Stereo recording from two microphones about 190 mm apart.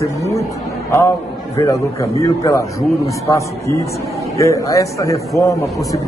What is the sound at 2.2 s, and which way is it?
Speech, 15° left (ahead or behind).